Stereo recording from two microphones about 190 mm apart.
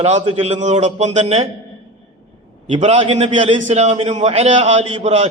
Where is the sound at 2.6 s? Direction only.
35° right (ahead or behind).